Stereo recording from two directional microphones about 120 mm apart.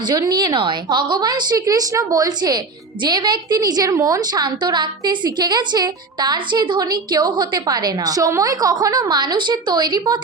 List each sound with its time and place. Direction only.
0.0 s a woman's voice: 35° right (ahead or behind)